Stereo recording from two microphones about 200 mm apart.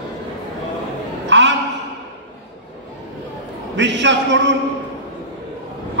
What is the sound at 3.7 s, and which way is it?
Speech, 65° right (ahead or behind).